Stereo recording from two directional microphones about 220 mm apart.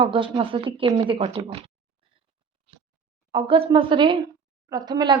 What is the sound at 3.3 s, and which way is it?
Speech, 25° right (ahead or behind).